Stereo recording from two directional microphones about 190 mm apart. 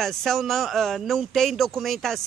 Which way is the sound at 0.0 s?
Centre (ahead or behind).